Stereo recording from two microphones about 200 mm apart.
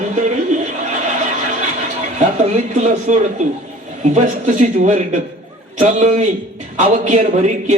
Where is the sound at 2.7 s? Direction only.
35° right (ahead or behind).